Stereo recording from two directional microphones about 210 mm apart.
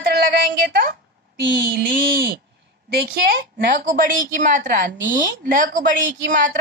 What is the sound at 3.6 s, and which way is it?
A woman's voice, 40° right (ahead or behind).